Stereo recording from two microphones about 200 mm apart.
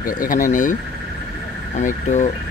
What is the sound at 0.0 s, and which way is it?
Speech, 45° left (ahead or behind).